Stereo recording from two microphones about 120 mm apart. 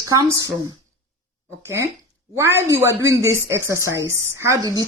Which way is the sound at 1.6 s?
20° right (ahead or behind).